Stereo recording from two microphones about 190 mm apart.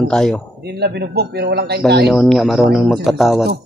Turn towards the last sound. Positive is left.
turn(degrees=0)  # may be behind; listen again after turning